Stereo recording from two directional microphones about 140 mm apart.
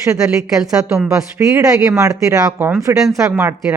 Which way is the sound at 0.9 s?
5° right (ahead or behind).